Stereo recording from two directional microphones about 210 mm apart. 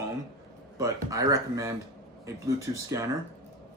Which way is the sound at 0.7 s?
15° right (ahead or behind).